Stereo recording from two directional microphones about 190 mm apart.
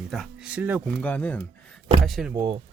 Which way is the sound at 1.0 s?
10° left (ahead or behind).